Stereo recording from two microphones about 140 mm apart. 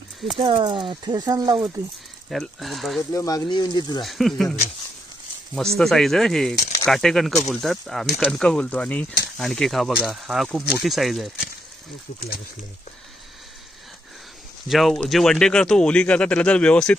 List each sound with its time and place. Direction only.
0.4 s speech: 35° right (ahead or behind)
2.2 s speech: centre (ahead or behind)
3.1 s speech: 25° left (ahead or behind)
4.0 s speech: centre (ahead or behind)
14.7 s speech: centre (ahead or behind)